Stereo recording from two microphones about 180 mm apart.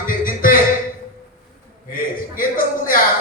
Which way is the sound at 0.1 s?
50° left (ahead or behind).